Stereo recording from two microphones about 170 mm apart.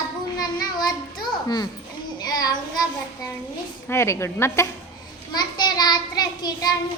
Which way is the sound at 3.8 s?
15° left (ahead or behind).